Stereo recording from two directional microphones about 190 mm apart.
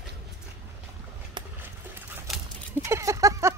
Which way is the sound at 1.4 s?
25° right (ahead or behind).